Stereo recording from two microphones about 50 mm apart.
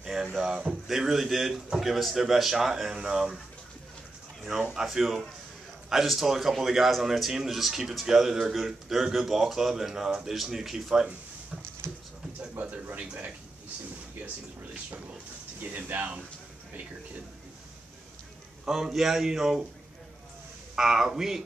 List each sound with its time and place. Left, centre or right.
0.0 s a sound: centre
0.8 s a man's voice: centre
4.4 s a man's voice: centre
11.8 s a sound: right
12.5 s speech: right
15.6 s speech: right
18.7 s speech: centre
20.7 s speech: centre